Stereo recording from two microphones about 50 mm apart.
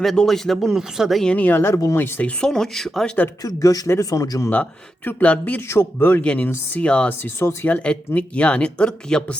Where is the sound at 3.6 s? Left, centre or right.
Left.